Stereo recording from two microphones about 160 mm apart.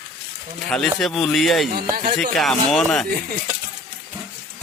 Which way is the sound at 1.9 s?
55° right (ahead or behind).